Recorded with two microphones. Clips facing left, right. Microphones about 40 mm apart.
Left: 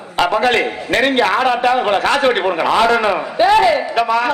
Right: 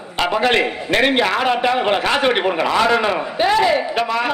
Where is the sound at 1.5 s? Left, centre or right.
Centre.